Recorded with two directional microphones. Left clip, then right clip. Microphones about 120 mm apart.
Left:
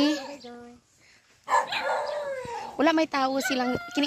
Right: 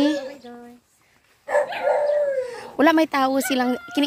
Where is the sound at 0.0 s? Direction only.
20° right (ahead or behind).